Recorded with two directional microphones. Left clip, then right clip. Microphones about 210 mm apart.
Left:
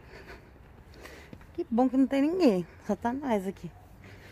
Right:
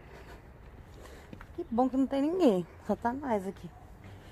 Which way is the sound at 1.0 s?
25° left (ahead or behind).